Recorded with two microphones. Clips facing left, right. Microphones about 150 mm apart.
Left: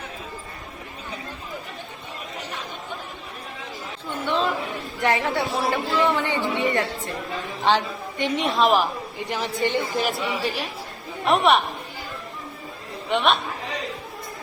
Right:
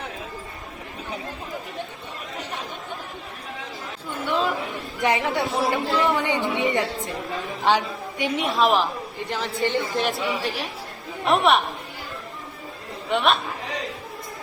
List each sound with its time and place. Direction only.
4.3 s a sound: 5° right (ahead or behind)
4.9 s speech: 15° right (ahead or behind); by 8.8 s centre (ahead or behind)
8.8 s a woman's voice: 15° left (ahead or behind)
10.0 s speech: centre (ahead or behind)
13.1 s speech: centre (ahead or behind)